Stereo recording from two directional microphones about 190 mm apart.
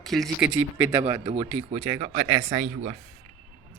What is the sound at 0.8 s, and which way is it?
Speech, 20° right (ahead or behind).